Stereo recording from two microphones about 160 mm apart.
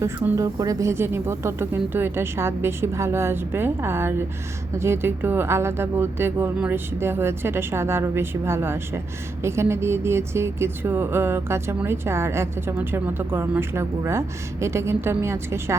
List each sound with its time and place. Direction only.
0.0 s a woman's voice: 15° right (ahead or behind)